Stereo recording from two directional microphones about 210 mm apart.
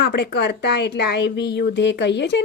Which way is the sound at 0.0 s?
50° left (ahead or behind).